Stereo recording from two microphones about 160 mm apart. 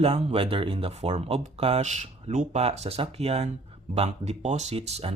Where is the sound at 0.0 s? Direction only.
35° right (ahead or behind).